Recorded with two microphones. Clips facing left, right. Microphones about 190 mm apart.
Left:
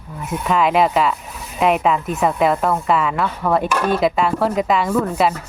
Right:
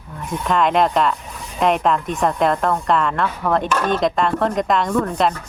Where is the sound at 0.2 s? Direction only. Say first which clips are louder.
Left 1 dB; 5° left (ahead or behind).